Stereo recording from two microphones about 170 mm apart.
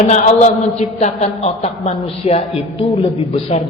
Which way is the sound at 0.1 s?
45° left (ahead or behind).